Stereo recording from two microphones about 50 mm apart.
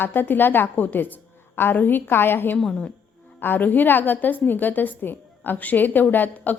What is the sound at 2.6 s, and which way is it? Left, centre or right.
Speech, centre.